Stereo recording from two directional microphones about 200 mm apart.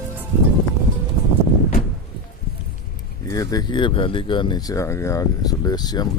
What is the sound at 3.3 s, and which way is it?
Speech, 20° left (ahead or behind).